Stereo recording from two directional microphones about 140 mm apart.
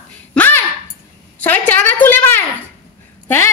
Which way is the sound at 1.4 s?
10° left (ahead or behind).